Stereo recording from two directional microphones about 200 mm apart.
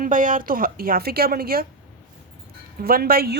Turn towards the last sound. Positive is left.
turn(degrees=-50)  # may be behind; listen again after turning